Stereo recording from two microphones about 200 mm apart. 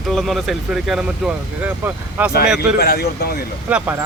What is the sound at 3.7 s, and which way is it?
Speech, 10° right (ahead or behind).